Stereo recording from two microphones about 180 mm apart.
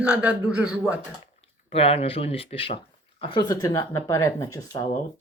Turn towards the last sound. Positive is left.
turn(degrees=20)  # may be behind; listen again after turning